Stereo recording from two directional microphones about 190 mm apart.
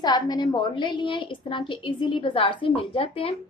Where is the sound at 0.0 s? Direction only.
20° left (ahead or behind).